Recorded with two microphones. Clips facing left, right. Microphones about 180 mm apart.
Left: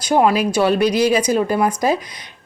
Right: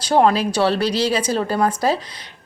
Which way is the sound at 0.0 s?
10° left (ahead or behind).